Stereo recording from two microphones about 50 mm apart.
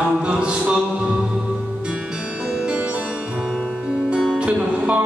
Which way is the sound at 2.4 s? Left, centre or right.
Right.